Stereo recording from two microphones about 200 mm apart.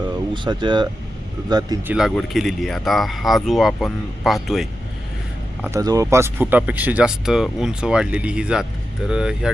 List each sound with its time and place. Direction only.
0.3 s speech: 25° right (ahead or behind)
1.9 s speech: centre (ahead or behind)
5.6 s speech: 15° right (ahead or behind)